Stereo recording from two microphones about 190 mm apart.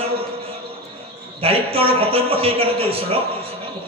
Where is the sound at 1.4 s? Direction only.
30° right (ahead or behind).